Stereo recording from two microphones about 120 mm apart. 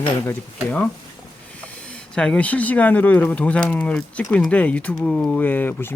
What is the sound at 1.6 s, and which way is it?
Speech, 10° left (ahead or behind).